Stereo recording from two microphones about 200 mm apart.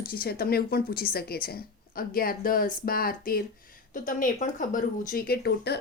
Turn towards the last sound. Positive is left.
turn(degrees=55)  # may be behind; listen again after turning